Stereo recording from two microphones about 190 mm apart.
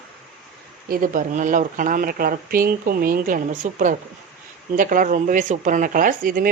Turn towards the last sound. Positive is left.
turn(degrees=-50)  # may be behind; listen again after turning